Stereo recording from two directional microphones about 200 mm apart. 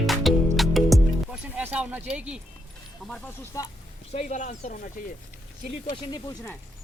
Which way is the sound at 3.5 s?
15° left (ahead or behind).